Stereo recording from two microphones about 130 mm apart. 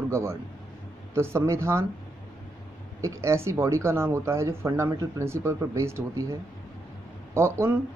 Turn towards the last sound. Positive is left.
turn(degrees=-20)  # may be behind; listen again after turning